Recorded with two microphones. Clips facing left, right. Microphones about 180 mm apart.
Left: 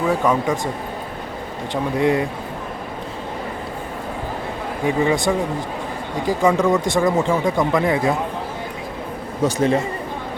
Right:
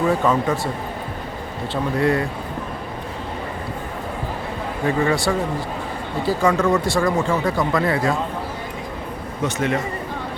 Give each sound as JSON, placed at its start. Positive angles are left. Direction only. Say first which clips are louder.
{"t": 0.1, "sound": "speech", "louder": "even", "side_deg": 15}
{"t": 1.7, "sound": "speech", "louder": "left 1 dB", "side_deg": 20}
{"t": 4.9, "sound": "speech", "louder": "left 1 dB", "side_deg": 15}
{"t": 9.6, "sound": "speech", "louder": "left 4 dB", "side_deg": 30}